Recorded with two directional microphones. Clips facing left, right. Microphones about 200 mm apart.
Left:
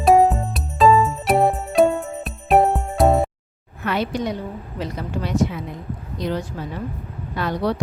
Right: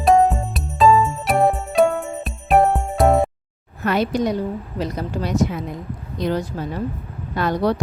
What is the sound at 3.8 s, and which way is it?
A woman's voice, 40° right (ahead or behind).